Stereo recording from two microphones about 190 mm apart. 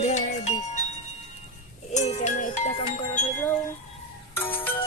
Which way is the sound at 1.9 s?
35° left (ahead or behind).